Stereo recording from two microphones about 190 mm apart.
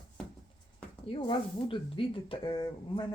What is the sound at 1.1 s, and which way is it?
Speech, 30° left (ahead or behind).